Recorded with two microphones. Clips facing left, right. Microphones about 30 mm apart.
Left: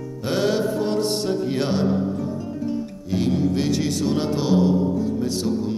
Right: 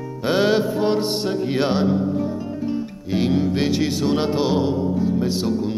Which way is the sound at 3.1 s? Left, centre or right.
Right.